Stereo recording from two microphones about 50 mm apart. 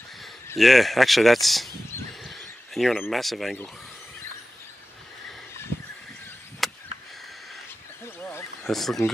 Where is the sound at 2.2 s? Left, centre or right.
Centre.